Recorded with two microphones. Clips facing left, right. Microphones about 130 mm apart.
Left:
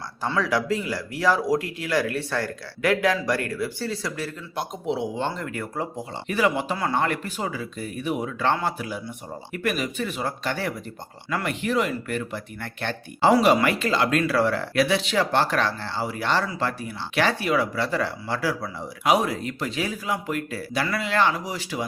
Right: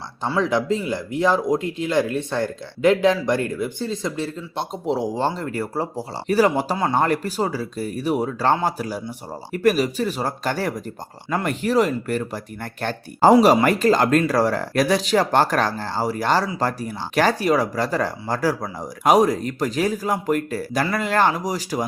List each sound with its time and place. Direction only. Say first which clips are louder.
0.3 s speech: right 3 dB; 20° right (ahead or behind)
4.9 s speech: right 5 dB; 35° right (ahead or behind)